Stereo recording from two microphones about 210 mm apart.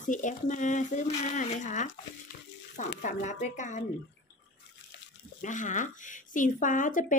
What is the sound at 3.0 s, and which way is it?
Speech, 35° left (ahead or behind).